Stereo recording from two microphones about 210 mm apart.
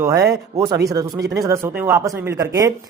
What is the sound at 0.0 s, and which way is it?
Speech, 15° right (ahead or behind).